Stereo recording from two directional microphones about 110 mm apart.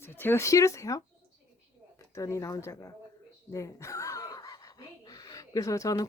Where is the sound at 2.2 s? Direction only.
30° left (ahead or behind).